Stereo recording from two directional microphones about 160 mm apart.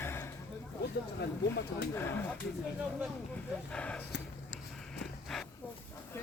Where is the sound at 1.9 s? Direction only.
15° left (ahead or behind).